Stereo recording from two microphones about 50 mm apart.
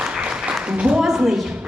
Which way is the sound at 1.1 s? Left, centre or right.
Centre.